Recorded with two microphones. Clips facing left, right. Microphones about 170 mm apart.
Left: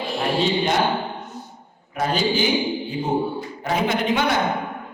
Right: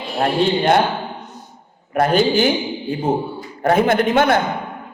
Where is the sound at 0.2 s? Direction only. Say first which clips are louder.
Right 5 dB; 55° right (ahead or behind).